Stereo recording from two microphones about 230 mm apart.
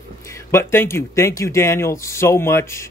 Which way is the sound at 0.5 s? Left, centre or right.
Centre.